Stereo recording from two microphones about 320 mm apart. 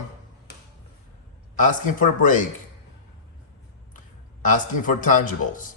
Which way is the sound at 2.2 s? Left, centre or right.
Left.